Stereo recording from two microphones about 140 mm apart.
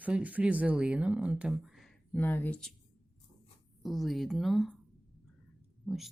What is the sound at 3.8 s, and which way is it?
Speech, centre (ahead or behind).